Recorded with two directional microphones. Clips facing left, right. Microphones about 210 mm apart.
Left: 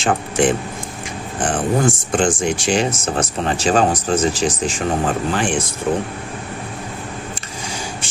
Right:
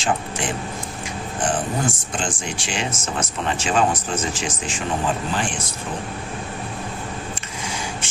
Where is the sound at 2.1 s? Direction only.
45° left (ahead or behind).